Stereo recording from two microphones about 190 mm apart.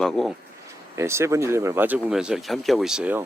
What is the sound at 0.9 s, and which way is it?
Speech, 15° right (ahead or behind).